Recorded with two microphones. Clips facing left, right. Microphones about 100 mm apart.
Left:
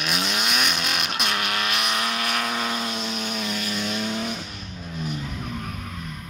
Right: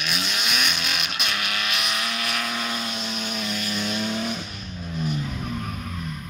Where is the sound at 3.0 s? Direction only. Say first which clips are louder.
Left 1 dB; 15° left (ahead or behind).